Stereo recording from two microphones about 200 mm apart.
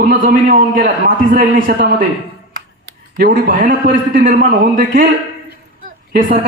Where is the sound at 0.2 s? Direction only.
45° right (ahead or behind).